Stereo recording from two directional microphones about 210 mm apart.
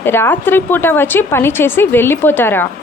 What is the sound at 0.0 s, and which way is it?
A woman's voice, 10° left (ahead or behind).